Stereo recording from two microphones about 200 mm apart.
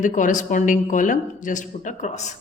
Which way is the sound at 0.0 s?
40° left (ahead or behind).